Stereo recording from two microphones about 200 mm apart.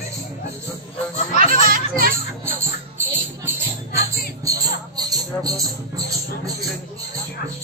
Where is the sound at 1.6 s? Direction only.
45° right (ahead or behind).